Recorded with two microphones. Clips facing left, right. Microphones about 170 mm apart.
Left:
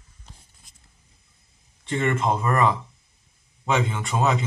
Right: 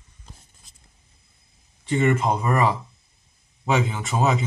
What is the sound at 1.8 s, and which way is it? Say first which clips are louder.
A man's voice: right 3 dB; centre (ahead or behind).